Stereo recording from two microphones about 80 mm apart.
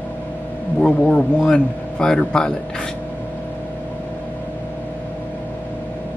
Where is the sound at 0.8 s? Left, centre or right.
Centre.